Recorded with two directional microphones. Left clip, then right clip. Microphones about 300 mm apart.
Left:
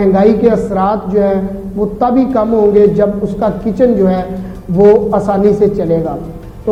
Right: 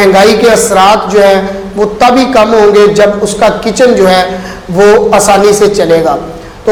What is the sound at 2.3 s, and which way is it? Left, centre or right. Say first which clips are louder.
Speech: right 7 dB; centre.